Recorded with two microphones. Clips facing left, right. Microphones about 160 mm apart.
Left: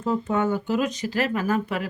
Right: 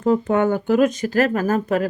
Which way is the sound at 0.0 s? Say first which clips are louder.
Right 6 dB; 65° right (ahead or behind).